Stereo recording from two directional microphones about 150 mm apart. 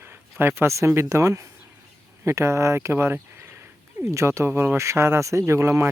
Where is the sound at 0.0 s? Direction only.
15° right (ahead or behind).